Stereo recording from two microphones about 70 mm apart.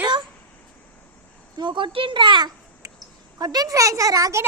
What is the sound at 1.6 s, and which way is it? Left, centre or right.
Speech, right.